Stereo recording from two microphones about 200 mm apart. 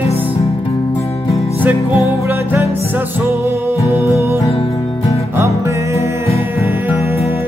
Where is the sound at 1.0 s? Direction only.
15° left (ahead or behind).